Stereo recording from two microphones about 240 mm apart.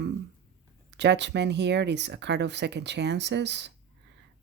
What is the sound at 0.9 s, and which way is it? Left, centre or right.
Speech, right.